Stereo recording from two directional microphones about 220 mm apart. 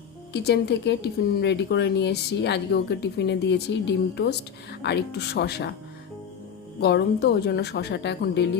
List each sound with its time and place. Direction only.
0.4 s speech: 50° left (ahead or behind)
6.7 s speech: 50° left (ahead or behind)